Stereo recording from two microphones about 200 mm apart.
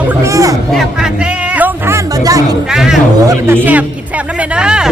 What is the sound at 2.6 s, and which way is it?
A man's voice, 5° right (ahead or behind).